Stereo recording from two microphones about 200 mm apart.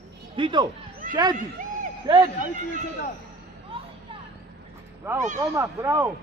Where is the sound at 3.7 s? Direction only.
25° right (ahead or behind).